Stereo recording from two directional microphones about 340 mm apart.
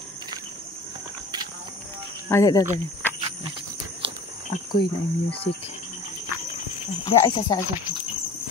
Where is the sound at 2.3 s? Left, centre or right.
Centre.